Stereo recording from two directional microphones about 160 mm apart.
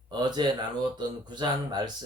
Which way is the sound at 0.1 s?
25° right (ahead or behind).